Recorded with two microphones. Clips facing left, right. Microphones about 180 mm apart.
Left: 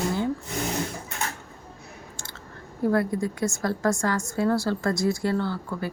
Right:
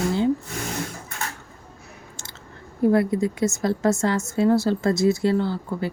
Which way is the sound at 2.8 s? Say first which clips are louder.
Right 4 dB; 20° right (ahead or behind).